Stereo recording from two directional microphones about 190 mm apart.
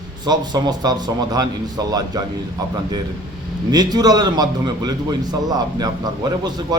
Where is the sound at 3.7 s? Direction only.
20° right (ahead or behind).